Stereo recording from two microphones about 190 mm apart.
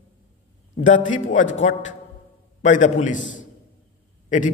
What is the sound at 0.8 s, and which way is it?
A man's voice, 40° left (ahead or behind).